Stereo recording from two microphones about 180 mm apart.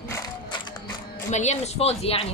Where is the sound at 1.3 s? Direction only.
40° left (ahead or behind).